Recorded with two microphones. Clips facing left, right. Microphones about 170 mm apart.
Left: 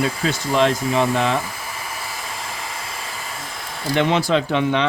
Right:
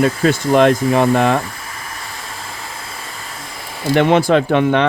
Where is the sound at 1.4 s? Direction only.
5° left (ahead or behind).